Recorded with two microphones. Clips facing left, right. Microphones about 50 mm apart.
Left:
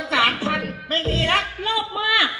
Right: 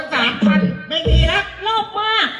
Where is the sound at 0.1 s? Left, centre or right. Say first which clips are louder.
Right 4 dB; right.